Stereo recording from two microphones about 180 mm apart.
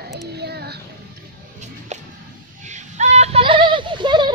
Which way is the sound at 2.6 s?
40° right (ahead or behind).